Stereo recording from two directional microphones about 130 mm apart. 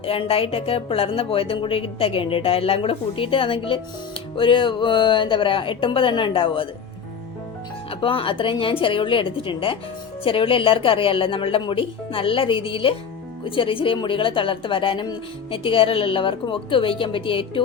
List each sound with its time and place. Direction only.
0.0 s a woman's voice: 45° left (ahead or behind)
7.9 s a woman's voice: 40° left (ahead or behind)